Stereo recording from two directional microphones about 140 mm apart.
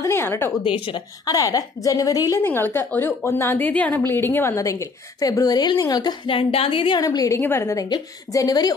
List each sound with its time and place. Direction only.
0.0 s a sound: 20° left (ahead or behind)
0.7 s a woman's voice: 40° left (ahead or behind)
1.2 s a woman's voice: 25° left (ahead or behind)
2.4 s a woman's voice: 15° left (ahead or behind)